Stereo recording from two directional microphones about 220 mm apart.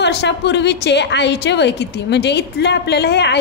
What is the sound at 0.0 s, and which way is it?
A woman's voice, 50° left (ahead or behind).